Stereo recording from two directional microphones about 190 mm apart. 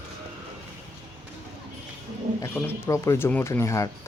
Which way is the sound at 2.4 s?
10° left (ahead or behind).